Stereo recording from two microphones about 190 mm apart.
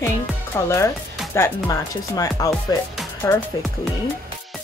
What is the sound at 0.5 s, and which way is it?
Speech, 15° left (ahead or behind).